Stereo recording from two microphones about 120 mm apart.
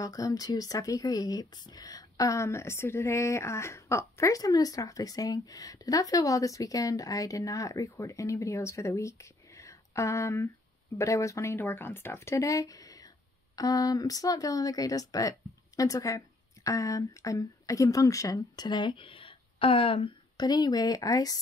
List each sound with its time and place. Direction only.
0.0 s speech: 30° left (ahead or behind)